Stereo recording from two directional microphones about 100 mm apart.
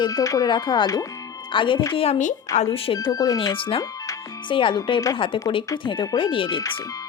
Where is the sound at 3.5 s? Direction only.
60° left (ahead or behind).